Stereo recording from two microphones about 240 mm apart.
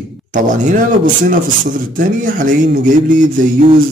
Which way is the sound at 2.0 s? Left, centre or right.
Right.